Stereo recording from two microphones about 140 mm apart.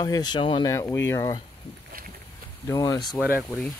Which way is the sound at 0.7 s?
20° left (ahead or behind).